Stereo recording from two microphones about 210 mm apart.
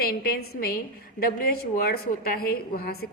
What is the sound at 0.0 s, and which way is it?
A woman's voice, 45° left (ahead or behind).